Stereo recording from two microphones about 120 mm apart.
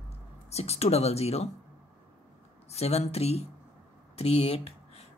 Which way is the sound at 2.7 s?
60° left (ahead or behind).